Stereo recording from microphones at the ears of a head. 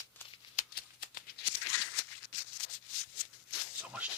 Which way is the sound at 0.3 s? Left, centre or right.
Left.